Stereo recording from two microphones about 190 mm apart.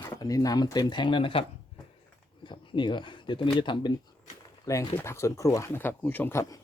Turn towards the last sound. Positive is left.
turn(degrees=10)  # may be behind; listen again after turning